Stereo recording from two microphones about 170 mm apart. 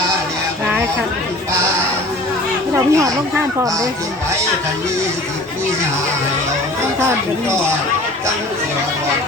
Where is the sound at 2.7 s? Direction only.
15° right (ahead or behind).